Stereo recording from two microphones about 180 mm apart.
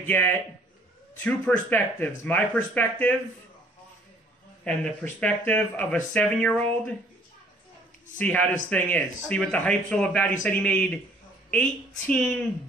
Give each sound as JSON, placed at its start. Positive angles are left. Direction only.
{"t": 0.0, "sound": "speech", "side_deg": 10}
{"t": 4.6, "sound": "speech", "side_deg": 10}
{"t": 8.2, "sound": "speech", "side_deg": 10}
{"t": 12.1, "sound": "speech", "side_deg": 5}